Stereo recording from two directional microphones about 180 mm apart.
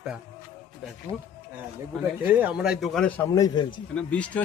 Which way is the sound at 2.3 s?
10° right (ahead or behind).